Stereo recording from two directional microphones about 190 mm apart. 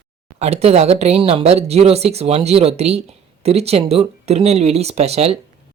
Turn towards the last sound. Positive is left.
turn(degrees=-35)  # may be behind; listen again after turning